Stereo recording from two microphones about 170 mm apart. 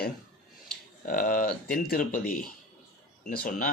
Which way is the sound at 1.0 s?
55° left (ahead or behind).